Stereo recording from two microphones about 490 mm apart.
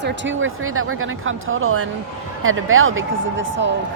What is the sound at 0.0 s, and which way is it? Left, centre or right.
Speech, right.